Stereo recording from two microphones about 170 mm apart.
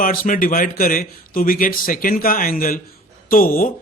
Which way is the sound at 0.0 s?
55° left (ahead or behind).